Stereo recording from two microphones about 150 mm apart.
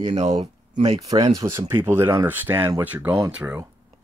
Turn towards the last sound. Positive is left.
turn(degrees=-20)  # may be behind; listen again after turning